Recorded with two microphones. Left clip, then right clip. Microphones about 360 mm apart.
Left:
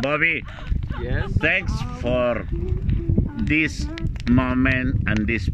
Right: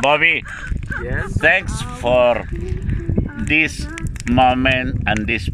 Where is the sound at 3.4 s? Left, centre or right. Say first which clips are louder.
Right 5 dB; centre.